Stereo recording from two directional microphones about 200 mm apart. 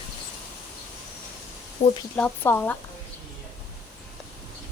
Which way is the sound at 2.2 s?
10° left (ahead or behind).